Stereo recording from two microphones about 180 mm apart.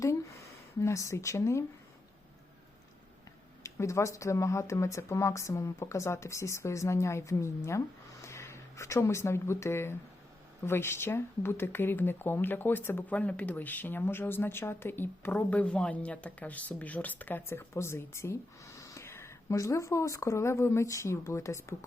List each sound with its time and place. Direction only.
0.8 s speech: 15° left (ahead or behind)
3.6 s speech: 15° left (ahead or behind)